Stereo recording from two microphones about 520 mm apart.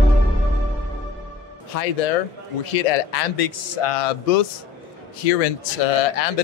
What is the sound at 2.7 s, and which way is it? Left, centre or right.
A man's voice, left.